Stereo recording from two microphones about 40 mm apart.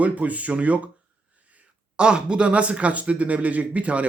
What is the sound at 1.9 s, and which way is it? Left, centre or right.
Speech, right.